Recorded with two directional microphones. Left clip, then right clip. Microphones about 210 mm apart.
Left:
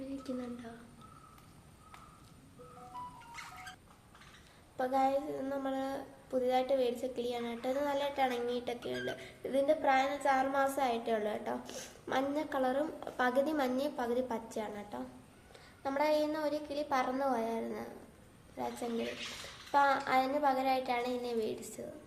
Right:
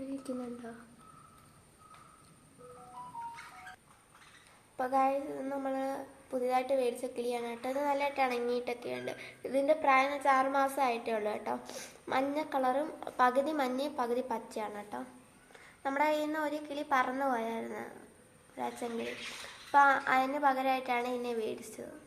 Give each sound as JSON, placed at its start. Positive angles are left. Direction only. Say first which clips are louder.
{"t": 0.3, "sound": "a woman's voice", "louder": "right 1 dB", "side_deg": -30}
{"t": 4.8, "sound": "a woman's voice", "louder": "right 1 dB", "side_deg": 10}